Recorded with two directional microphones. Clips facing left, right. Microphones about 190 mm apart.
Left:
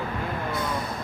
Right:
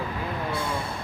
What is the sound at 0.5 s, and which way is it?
Speech, 30° right (ahead or behind).